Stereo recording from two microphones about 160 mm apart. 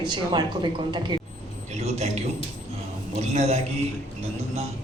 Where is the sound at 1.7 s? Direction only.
45° right (ahead or behind).